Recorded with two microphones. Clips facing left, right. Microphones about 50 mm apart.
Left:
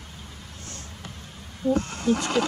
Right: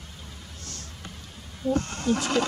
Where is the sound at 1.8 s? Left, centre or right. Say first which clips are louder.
Left 2 dB; centre.